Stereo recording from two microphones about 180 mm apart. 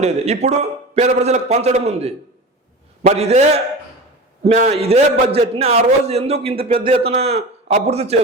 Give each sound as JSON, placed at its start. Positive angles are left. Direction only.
{"t": 0.0, "sound": "a man's voice", "side_deg": -40}